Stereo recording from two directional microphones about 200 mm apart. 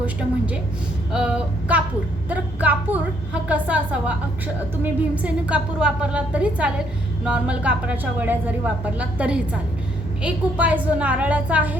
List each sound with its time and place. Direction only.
0.0 s a woman's voice: 5° right (ahead or behind)